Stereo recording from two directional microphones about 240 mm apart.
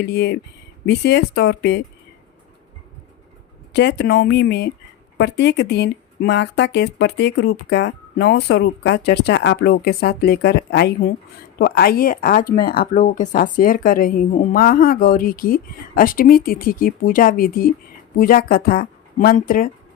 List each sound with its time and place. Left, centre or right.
0.0 s speech: left
3.7 s speech: left